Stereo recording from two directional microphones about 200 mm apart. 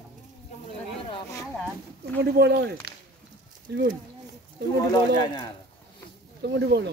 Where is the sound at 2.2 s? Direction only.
55° right (ahead or behind).